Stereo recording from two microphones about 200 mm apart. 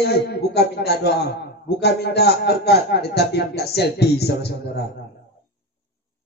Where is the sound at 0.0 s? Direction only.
55° left (ahead or behind).